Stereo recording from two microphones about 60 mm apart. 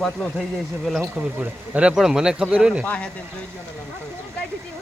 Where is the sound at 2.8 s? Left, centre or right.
Left.